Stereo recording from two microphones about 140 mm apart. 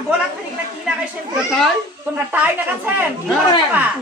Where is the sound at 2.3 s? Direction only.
15° right (ahead or behind).